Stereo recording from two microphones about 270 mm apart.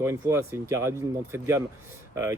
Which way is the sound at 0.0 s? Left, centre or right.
Centre.